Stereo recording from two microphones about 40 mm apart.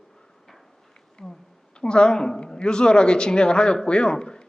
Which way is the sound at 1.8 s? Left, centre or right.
Left.